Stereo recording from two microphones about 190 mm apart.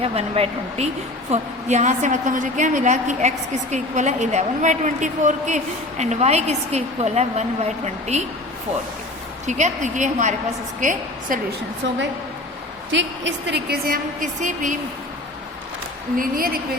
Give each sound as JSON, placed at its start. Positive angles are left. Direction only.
{"t": 0.0, "sound": "a woman's voice", "side_deg": -30}
{"t": 9.5, "sound": "a woman's voice", "side_deg": -40}
{"t": 12.9, "sound": "a woman's voice", "side_deg": -70}
{"t": 16.1, "sound": "a woman's voice", "side_deg": -50}